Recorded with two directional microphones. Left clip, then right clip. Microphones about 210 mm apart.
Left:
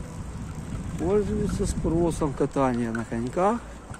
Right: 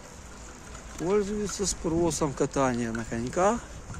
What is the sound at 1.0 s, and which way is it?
Speech, 25° right (ahead or behind).